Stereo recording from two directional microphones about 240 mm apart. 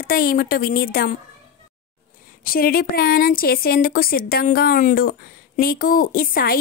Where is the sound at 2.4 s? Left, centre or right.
Left.